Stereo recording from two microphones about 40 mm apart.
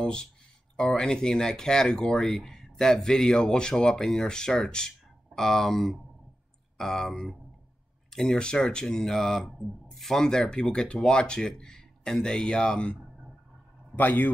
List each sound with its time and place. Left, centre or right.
0.0 s speech: centre
8.1 s speech: centre
9.0 s speech: centre
9.5 s speech: centre
9.8 s a sound: centre
10.5 s speech: left
13.9 s a man's voice: left